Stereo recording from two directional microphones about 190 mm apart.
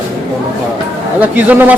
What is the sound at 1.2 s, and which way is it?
Speech, 10° right (ahead or behind).